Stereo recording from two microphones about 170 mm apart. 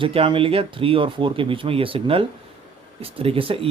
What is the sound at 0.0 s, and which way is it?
Speech, 30° right (ahead or behind).